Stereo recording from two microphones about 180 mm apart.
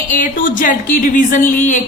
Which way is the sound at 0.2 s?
50° left (ahead or behind).